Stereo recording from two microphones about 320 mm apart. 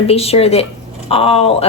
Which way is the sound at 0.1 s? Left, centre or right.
Centre.